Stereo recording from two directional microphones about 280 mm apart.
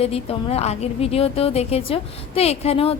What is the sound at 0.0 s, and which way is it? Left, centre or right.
A woman's voice, left.